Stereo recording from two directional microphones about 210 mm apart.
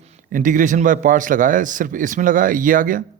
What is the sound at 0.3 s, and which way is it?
A man's voice, 40° right (ahead or behind).